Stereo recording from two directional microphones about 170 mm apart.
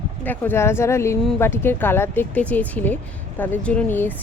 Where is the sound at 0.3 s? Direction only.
15° left (ahead or behind).